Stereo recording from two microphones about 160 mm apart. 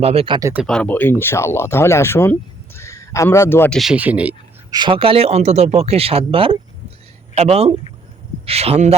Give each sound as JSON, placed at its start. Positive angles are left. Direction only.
{"t": 0.0, "sound": "speech", "side_deg": -40}
{"t": 0.5, "sound": "a man's voice", "side_deg": 0}
{"t": 3.8, "sound": "speech", "side_deg": -5}
{"t": 4.7, "sound": "speech", "side_deg": -30}